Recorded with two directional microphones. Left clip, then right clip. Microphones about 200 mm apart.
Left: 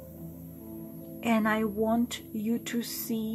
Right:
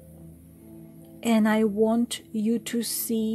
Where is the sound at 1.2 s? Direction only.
35° right (ahead or behind).